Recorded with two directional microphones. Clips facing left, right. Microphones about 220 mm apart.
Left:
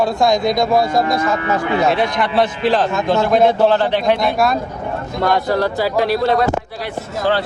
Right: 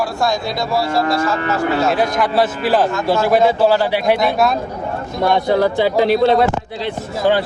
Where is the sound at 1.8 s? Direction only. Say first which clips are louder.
Even; centre (ahead or behind).